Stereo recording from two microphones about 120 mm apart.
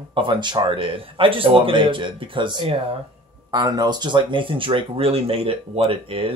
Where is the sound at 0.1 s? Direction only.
45° right (ahead or behind).